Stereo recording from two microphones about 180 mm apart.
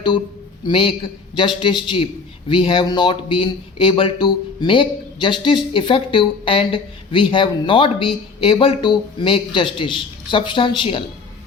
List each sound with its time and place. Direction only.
0.7 s a man's voice: 30° left (ahead or behind)